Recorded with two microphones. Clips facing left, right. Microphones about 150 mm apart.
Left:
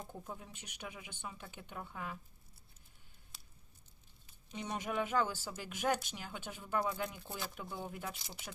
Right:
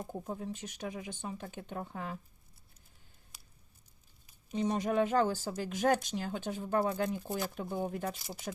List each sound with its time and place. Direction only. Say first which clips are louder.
0.0 s speech: right 8 dB; 40° right (ahead or behind)
4.5 s speech: right 8 dB; 35° right (ahead or behind)